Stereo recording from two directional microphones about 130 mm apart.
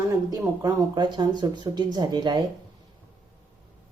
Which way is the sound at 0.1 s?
25° right (ahead or behind).